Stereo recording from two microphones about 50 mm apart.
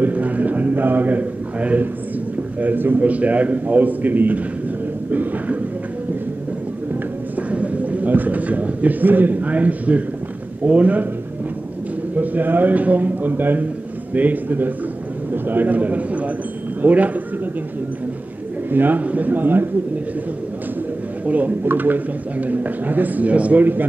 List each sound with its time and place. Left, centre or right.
0.0 s a sound: right
2.6 s a man's voice: right
3.1 s a man's voice: right
7.3 s a man's voice: right
12.2 s a man's voice: right
18.7 s a man's voice: right
21.3 s a man's voice: right
23.6 s a man's voice: right